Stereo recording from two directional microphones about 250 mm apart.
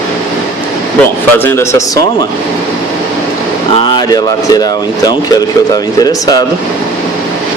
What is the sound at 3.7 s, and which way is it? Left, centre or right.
Speech, centre.